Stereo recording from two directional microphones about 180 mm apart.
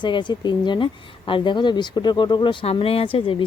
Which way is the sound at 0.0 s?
25° left (ahead or behind).